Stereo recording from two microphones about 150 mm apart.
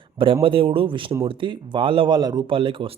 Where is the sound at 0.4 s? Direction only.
35° right (ahead or behind).